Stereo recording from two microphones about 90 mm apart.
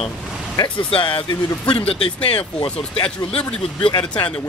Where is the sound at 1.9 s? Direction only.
90° left.